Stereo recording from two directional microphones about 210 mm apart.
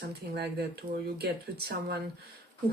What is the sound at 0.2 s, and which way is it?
Speech, 50° right (ahead or behind).